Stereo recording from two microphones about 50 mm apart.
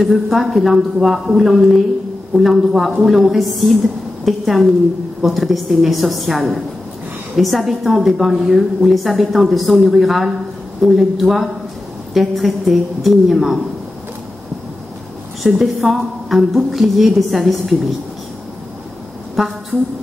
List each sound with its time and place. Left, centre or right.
0.0 s a woman's voice: centre
15.4 s a woman's voice: centre
19.4 s a woman's voice: centre